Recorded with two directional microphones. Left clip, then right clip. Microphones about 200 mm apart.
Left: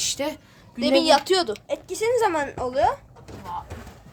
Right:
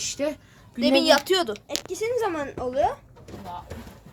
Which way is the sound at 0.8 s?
5° right (ahead or behind).